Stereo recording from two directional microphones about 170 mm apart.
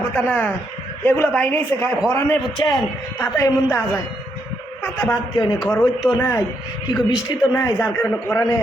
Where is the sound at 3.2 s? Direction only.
20° left (ahead or behind).